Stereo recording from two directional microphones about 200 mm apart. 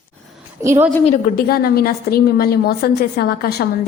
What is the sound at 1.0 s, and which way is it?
A woman's voice, 40° left (ahead or behind).